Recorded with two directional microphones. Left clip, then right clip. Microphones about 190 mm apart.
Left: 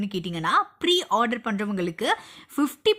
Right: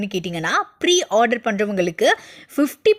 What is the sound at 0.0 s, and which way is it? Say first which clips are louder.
A woman's voice: right 4 dB; 15° right (ahead or behind).